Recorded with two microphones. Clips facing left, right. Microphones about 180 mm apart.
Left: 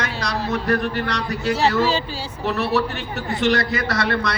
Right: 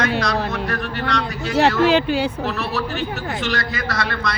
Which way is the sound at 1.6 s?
60° right (ahead or behind).